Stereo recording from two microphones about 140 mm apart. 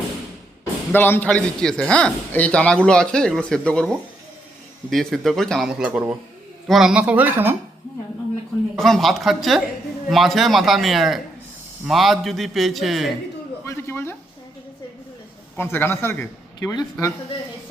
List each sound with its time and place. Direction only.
0.9 s a man's voice: 15° left (ahead or behind)
4.9 s speech: centre (ahead or behind)
8.7 s speech: centre (ahead or behind)
13.7 s a sound: 15° left (ahead or behind)
15.5 s a man's voice: 15° left (ahead or behind)